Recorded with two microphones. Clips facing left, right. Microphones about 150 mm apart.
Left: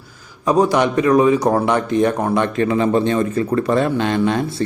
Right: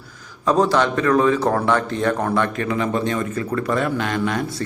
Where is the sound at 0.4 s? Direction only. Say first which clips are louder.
Left 2 dB; 10° left (ahead or behind).